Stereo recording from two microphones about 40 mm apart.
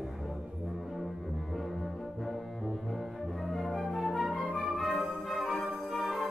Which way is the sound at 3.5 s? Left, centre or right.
Centre.